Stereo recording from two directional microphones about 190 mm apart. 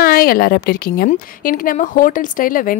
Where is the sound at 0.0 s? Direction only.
50° left (ahead or behind).